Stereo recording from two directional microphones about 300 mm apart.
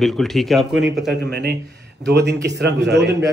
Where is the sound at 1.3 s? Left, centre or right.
Right.